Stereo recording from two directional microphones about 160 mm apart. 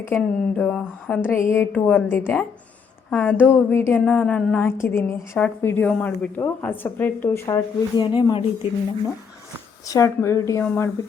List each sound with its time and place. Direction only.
0.0 s a woman's voice: 10° left (ahead or behind); by 8.4 s 30° left (ahead or behind)
9.8 s a woman's voice: 20° left (ahead or behind)